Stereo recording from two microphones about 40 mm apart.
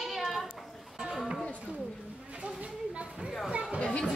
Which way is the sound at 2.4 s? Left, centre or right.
Right.